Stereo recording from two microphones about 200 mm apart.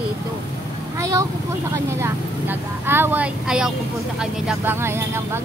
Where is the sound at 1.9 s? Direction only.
10° right (ahead or behind).